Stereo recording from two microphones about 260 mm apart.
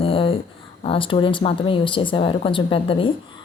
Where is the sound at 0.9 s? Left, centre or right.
Centre.